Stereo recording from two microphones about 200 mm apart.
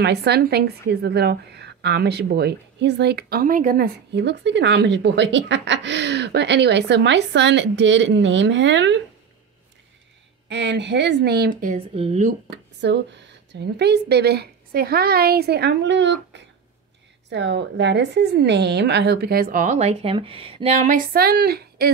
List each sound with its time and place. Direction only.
0.0 s a woman's voice: 55° right (ahead or behind)
10.5 s a woman's voice: 60° right (ahead or behind); by 12.3 s 30° right (ahead or behind)
12.4 s a woman's voice: 60° right (ahead or behind)